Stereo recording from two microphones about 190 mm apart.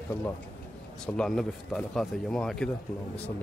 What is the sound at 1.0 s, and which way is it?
Speech, 5° left (ahead or behind).